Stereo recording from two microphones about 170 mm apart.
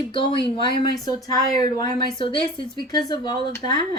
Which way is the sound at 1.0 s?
20° left (ahead or behind).